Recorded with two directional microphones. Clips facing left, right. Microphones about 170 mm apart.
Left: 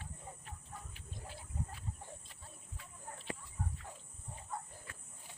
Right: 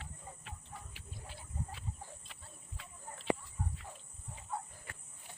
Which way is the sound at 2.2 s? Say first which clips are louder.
Even; 75° right (ahead or behind).